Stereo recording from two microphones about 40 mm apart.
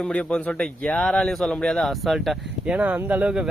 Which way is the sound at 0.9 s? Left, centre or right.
Centre.